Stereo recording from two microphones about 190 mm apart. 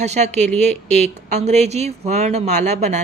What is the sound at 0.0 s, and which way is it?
A woman's voice, 35° right (ahead or behind).